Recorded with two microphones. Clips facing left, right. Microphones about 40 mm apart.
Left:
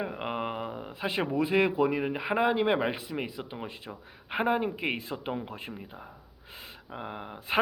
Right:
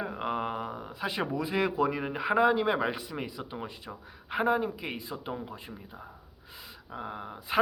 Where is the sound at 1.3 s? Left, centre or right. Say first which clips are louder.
Left 6 dB; left.